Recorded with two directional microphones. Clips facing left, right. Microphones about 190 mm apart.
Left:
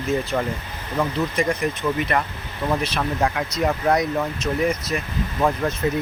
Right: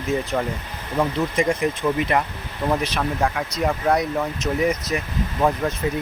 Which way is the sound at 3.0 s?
5° left (ahead or behind).